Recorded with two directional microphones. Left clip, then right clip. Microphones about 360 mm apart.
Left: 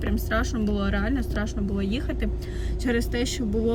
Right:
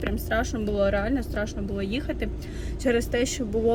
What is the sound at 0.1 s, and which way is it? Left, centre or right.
Speech, centre.